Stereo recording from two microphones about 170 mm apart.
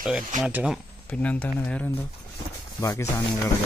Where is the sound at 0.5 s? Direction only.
10° right (ahead or behind).